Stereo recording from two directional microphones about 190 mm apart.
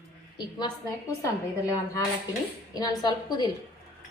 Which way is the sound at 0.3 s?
20° left (ahead or behind).